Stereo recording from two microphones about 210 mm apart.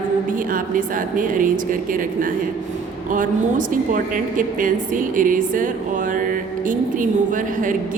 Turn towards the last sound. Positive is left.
turn(degrees=-40)  # may be behind; listen again after turning